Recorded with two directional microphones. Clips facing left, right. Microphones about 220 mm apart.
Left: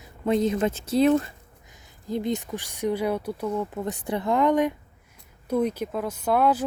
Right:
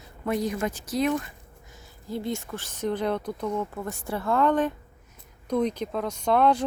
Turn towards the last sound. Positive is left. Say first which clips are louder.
# even
turn(degrees=5)  # may be behind; listen again after turning